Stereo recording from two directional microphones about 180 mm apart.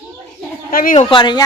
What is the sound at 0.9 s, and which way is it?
Speech, 25° left (ahead or behind).